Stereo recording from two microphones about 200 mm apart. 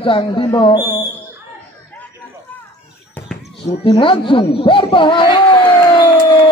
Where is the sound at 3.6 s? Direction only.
25° left (ahead or behind).